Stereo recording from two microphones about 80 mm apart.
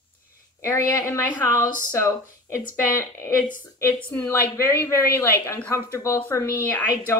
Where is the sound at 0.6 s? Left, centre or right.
Left.